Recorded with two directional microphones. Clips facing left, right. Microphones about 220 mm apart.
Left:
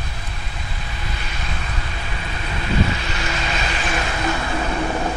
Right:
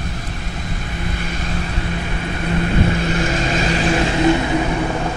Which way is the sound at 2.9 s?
50° right (ahead or behind).